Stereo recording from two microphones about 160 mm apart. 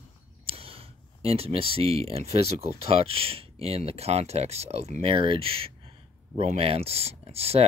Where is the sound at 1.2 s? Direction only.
40° right (ahead or behind).